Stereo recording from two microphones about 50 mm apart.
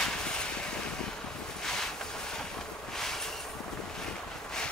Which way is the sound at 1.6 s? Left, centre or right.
Centre.